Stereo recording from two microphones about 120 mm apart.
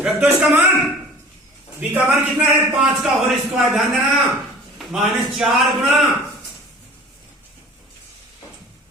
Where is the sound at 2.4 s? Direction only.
10° right (ahead or behind).